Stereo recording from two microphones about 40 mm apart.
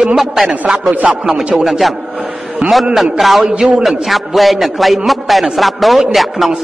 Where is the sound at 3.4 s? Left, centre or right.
Right.